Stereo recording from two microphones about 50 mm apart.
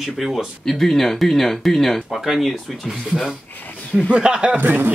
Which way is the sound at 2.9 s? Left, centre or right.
Centre.